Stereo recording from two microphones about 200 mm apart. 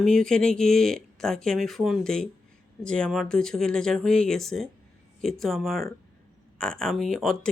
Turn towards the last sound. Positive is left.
turn(degrees=0)  # may be behind; listen again after turning